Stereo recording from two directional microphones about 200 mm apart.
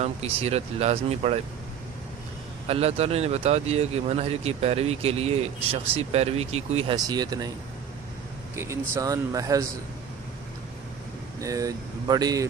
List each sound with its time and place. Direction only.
0.0 s speech: 30° right (ahead or behind)
2.6 s speech: 30° right (ahead or behind)
6.9 s speech: 20° right (ahead or behind)
8.5 s speech: 15° right (ahead or behind)
11.3 s speech: 15° right (ahead or behind)